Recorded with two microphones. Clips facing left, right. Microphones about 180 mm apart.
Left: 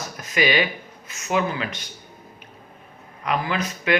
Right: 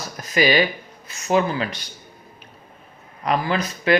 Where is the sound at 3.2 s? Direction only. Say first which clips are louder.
Right 3 dB; 35° right (ahead or behind).